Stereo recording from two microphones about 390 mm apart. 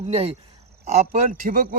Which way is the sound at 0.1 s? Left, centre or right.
Centre.